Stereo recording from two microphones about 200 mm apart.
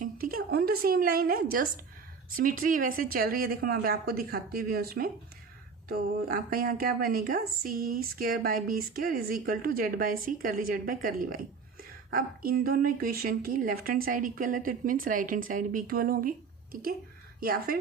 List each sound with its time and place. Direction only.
0.0 s a sound: 45° right (ahead or behind)
0.8 s a woman's voice: 50° right (ahead or behind)
17.4 s a woman's voice: 50° right (ahead or behind)